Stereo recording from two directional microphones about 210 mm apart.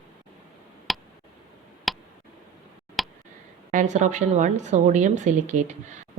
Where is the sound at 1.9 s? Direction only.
Centre (ahead or behind).